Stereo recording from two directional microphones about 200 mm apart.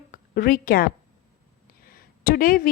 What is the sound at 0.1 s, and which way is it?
Speech, 45° left (ahead or behind).